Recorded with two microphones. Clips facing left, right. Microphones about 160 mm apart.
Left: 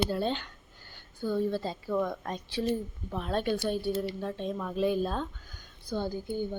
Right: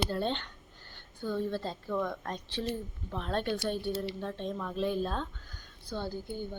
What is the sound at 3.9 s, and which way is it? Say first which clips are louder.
Speech: left 3 dB; 45° left (ahead or behind).